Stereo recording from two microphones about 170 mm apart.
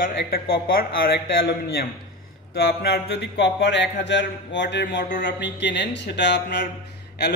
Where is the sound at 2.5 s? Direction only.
75° left (ahead or behind); by 6.7 s 90° left.